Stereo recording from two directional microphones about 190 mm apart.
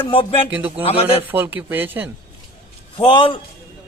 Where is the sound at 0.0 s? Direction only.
30° left (ahead or behind).